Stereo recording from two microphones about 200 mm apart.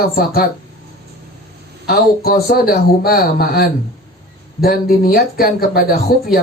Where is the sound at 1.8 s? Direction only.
50° left (ahead or behind).